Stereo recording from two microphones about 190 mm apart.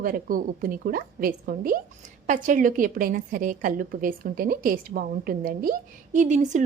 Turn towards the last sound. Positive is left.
turn(degrees=-40)  # may be behind; listen again after turning